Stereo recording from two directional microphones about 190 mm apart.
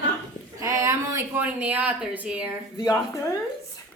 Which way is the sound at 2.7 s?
20° left (ahead or behind).